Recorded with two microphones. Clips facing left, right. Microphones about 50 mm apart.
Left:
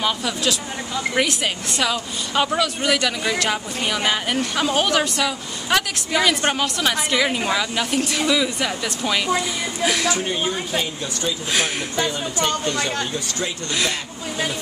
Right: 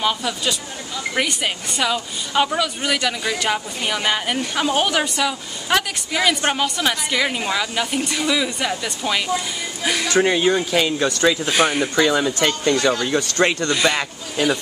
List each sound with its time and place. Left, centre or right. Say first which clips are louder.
0.0 s a woman's voice: right 1 dB; centre
10.1 s speech: right 7 dB; right
11.5 s a woman's voice: right 5 dB; centre
11.9 s speech: right 6 dB; right
13.0 s speech: right 7 dB; right
13.8 s speech: right 6 dB; right